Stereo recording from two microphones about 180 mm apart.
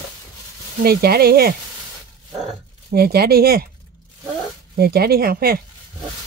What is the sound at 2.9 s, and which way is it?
Speech, 60° right (ahead or behind).